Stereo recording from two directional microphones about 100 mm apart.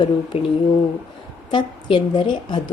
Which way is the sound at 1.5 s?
55° left (ahead or behind).